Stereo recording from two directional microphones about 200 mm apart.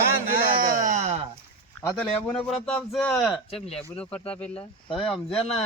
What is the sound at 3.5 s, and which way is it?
Speech, 30° left (ahead or behind).